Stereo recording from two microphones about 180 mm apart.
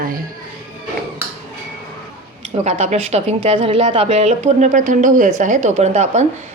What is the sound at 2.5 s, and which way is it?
A woman's voice, 35° right (ahead or behind).